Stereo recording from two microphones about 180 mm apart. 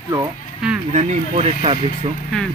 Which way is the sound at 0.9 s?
35° right (ahead or behind).